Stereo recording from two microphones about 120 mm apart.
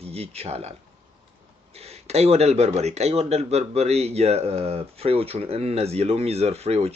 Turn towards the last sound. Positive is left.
turn(degrees=-60)  # may be behind; listen again after turning